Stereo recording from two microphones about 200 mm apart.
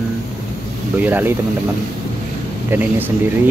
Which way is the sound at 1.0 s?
10° right (ahead or behind).